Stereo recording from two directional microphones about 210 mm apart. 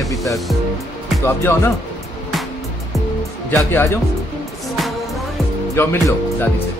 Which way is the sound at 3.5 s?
10° left (ahead or behind).